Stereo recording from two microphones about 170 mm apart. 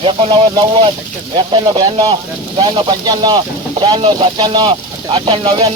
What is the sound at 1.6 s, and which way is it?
Speech, 25° right (ahead or behind).